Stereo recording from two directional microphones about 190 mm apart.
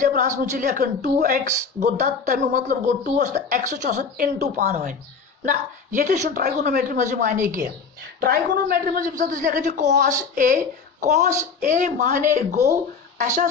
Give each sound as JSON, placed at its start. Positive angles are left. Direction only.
{"t": 0.0, "sound": "a woman's voice", "side_deg": -40}
{"t": 8.2, "sound": "a man's voice", "side_deg": -55}